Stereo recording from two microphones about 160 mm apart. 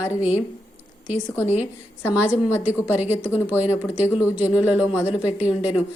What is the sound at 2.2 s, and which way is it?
Speech, 15° left (ahead or behind).